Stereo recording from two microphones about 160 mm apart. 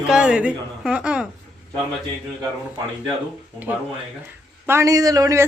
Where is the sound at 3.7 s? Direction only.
10° right (ahead or behind).